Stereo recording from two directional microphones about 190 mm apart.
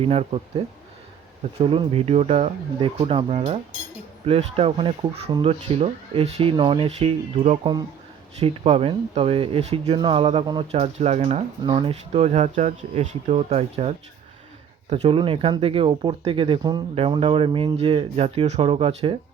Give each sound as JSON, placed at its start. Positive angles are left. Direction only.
{"t": 0.0, "sound": "speech", "side_deg": -30}
{"t": 10.7, "sound": "speech", "side_deg": -35}